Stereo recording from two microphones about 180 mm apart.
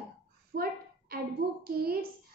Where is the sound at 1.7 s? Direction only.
60° right (ahead or behind).